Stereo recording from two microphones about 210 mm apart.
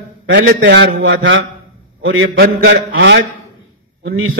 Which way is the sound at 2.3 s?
55° right (ahead or behind).